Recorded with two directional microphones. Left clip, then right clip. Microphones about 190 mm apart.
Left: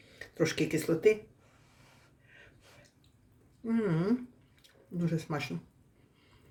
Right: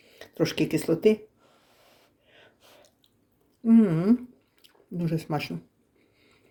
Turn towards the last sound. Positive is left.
turn(degrees=-35)  # may be behind; listen again after turning